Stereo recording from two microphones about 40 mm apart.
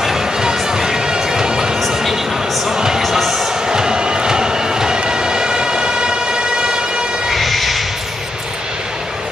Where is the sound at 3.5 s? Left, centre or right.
Centre.